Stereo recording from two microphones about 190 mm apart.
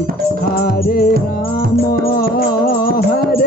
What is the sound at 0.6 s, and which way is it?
Music, 50° left (ahead or behind).